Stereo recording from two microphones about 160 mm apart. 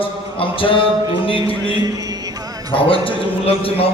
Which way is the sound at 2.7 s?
35° left (ahead or behind).